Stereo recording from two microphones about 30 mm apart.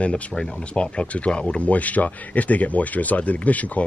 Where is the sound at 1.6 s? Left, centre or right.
Left.